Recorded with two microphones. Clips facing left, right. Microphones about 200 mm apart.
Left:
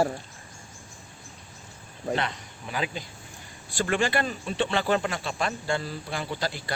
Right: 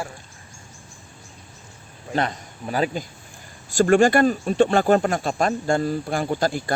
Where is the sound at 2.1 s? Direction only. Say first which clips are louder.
Right 6 dB; 45° right (ahead or behind).